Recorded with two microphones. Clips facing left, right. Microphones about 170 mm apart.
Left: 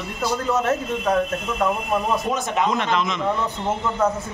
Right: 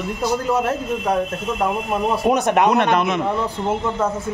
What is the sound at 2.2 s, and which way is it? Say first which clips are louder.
Speech: right 6 dB; 60° right (ahead or behind).